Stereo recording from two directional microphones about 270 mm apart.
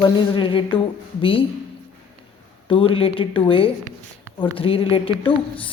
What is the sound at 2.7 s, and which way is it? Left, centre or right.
Speech, centre.